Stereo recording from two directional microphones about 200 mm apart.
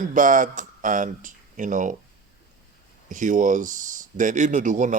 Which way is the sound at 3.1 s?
40° right (ahead or behind).